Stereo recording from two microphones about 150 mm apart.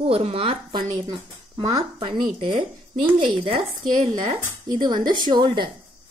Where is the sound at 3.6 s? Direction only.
55° right (ahead or behind).